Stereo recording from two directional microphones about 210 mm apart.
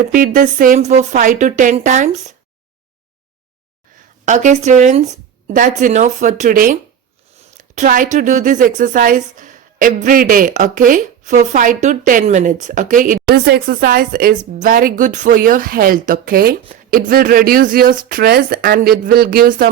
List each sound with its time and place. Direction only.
0.1 s a woman's voice: 40° right (ahead or behind)
4.3 s a woman's voice: 35° right (ahead or behind)
7.8 s a woman's voice: 40° right (ahead or behind)